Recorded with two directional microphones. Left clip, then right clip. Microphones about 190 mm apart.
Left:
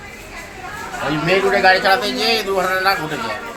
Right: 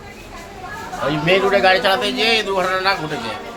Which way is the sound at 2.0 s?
30° right (ahead or behind).